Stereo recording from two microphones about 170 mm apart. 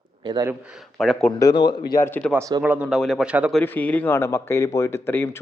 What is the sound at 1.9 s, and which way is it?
Speech, 15° left (ahead or behind).